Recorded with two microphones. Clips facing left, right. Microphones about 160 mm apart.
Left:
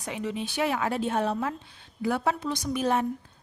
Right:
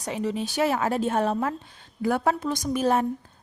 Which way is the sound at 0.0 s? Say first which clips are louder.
Right 4 dB; 35° right (ahead or behind).